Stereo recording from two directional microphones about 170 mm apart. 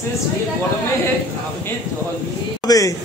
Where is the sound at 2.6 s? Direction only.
20° left (ahead or behind).